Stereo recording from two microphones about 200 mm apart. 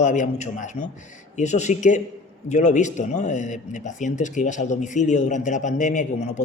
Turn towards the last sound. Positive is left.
turn(degrees=40)  # may be behind; listen again after turning